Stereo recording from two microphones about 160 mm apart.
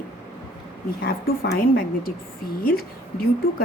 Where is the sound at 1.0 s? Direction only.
70° left (ahead or behind).